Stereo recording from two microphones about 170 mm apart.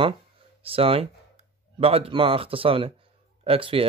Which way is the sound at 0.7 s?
35° right (ahead or behind).